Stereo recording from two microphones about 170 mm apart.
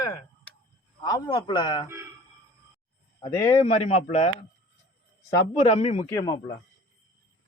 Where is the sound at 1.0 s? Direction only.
25° left (ahead or behind).